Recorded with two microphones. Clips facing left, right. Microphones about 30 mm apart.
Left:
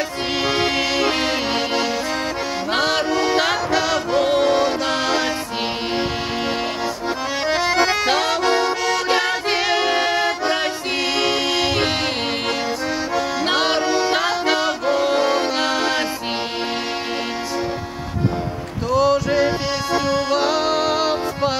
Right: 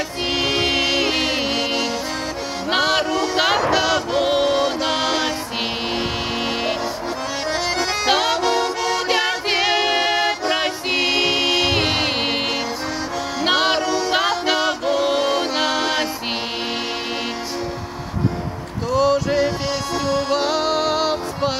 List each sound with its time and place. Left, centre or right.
0.4 s music: centre
4.5 s music: centre
7.5 s accordion: centre
8.0 s accordion: centre
8.4 s music: centre
13.4 s music: centre
13.7 s music: centre
14.3 s music: centre
18.9 s music: centre
19.9 s music: centre
20.2 s music: centre